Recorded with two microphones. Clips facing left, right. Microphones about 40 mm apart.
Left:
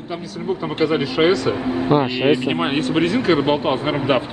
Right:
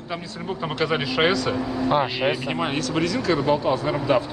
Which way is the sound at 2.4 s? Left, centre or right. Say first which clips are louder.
Left 5 dB; left.